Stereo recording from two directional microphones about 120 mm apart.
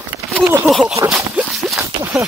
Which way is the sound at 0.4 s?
20° right (ahead or behind).